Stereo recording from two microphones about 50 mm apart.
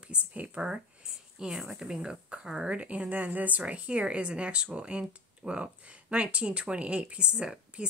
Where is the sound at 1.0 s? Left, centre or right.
Centre.